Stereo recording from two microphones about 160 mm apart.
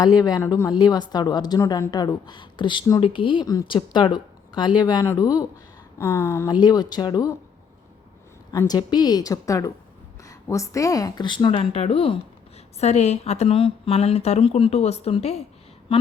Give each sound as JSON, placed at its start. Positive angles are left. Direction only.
{"t": 0.2, "sound": "a woman's voice", "side_deg": 20}
{"t": 8.5, "sound": "a woman's voice", "side_deg": 25}